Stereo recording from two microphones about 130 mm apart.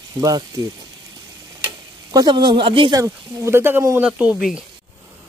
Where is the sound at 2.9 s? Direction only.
20° right (ahead or behind); by 4.6 s 5° right (ahead or behind).